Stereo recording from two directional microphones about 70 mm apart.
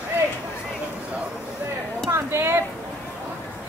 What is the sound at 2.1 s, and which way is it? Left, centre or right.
Speech, right.